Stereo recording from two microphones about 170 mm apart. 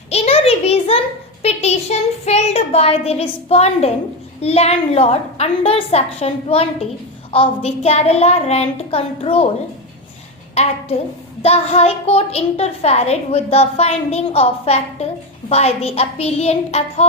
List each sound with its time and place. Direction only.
0.1 s a sound: 35° left (ahead or behind)
4.4 s a child's voice: 35° left (ahead or behind)
10.5 s a woman's voice: 40° left (ahead or behind)